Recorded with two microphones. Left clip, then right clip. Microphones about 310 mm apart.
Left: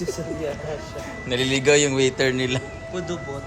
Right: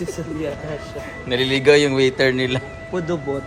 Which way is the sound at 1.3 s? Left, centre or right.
Centre.